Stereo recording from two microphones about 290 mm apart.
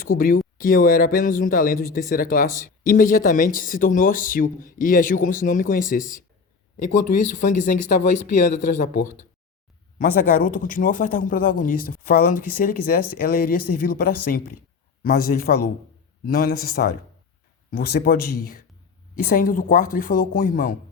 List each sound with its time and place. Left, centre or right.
0.0 s speech: left
10.0 s a woman's voice: left